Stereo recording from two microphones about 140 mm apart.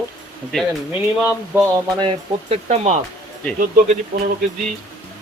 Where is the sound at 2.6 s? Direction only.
55° right (ahead or behind).